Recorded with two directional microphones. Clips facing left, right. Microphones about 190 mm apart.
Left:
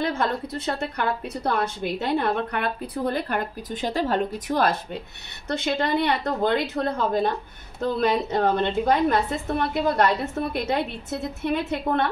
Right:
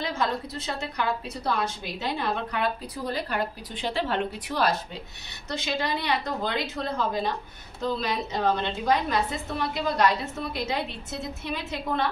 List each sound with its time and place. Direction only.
0.0 s a woman's voice: 55° left (ahead or behind)